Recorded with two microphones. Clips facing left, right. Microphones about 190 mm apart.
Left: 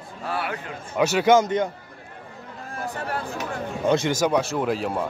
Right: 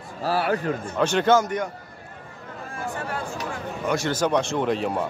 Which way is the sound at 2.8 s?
35° left (ahead or behind).